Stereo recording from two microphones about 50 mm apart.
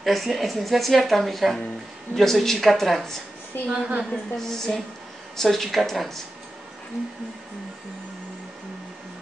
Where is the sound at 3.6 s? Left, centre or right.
Right.